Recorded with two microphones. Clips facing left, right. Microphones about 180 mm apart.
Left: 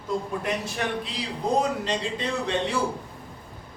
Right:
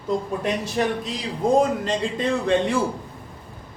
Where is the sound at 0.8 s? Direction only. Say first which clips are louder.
Right 10 dB; 30° right (ahead or behind).